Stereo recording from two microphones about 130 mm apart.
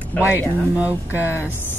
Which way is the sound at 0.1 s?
15° left (ahead or behind).